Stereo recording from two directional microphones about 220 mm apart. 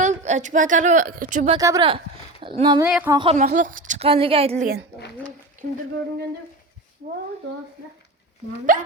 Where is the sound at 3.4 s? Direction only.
35° right (ahead or behind).